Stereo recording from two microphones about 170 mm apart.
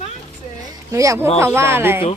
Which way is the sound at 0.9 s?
20° right (ahead or behind).